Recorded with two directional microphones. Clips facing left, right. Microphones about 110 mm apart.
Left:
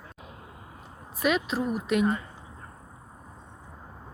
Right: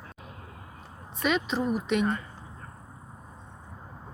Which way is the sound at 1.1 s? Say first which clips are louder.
Left 1 dB; 5° left (ahead or behind).